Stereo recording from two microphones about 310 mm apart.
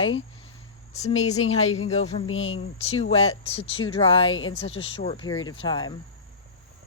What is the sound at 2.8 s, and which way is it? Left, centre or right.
A woman's voice, centre.